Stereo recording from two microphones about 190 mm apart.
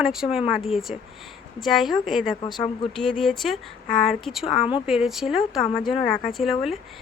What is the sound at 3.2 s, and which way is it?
A woman's voice, centre (ahead or behind).